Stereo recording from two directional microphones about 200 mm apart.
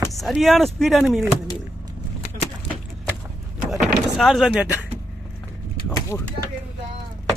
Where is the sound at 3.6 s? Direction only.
Centre (ahead or behind).